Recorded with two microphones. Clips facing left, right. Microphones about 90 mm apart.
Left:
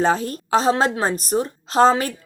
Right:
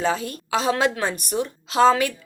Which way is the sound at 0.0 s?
40° left (ahead or behind).